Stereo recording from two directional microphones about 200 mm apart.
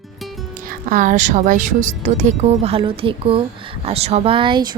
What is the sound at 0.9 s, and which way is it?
A woman's voice, 40° right (ahead or behind).